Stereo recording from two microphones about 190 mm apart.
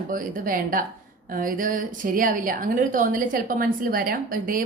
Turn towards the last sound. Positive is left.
turn(degrees=-45)  # may be behind; listen again after turning